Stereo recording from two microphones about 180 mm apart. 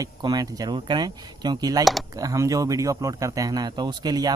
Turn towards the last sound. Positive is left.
turn(degrees=-20)  # may be behind; listen again after turning